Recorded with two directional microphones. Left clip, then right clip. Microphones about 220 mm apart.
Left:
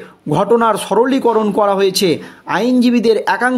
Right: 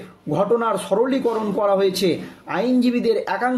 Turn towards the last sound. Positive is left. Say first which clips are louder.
# left 7 dB
turn(degrees=45)  # may be behind; listen again after turning